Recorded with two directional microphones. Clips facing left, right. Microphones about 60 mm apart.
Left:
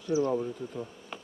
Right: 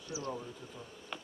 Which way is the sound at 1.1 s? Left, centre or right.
Centre.